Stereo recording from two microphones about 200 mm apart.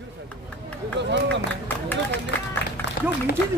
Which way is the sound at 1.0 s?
60° right (ahead or behind).